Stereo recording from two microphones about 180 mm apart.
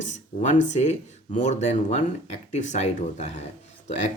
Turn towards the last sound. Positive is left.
turn(degrees=40)  # may be behind; listen again after turning